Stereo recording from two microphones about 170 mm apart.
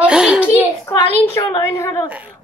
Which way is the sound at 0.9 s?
15° left (ahead or behind).